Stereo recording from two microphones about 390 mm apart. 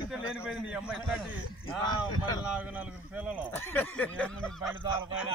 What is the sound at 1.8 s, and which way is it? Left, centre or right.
Speech, centre.